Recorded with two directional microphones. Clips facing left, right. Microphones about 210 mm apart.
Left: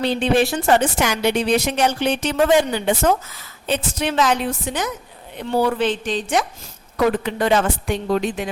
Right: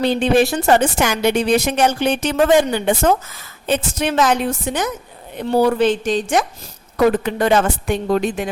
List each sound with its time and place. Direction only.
0.0 s a woman's voice: 45° right (ahead or behind)